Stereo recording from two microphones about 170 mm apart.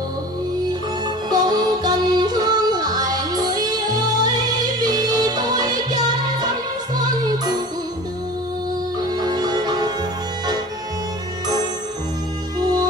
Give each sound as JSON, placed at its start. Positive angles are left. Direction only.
{"t": 1.3, "sound": "music", "side_deg": -25}
{"t": 9.1, "sound": "music", "side_deg": -25}
{"t": 12.5, "sound": "music", "side_deg": -25}